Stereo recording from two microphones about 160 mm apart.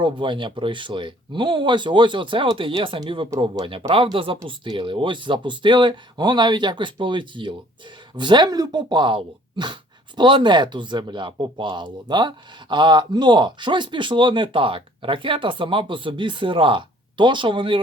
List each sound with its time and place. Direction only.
0.0 s speech: 30° right (ahead or behind)